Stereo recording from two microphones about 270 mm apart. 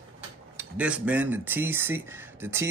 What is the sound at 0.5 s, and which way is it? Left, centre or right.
Speech, centre.